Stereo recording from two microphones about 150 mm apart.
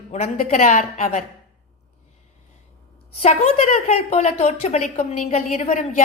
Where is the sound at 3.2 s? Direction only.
45° left (ahead or behind).